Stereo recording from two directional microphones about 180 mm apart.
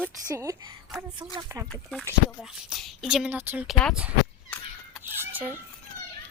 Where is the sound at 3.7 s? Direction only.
5° left (ahead or behind).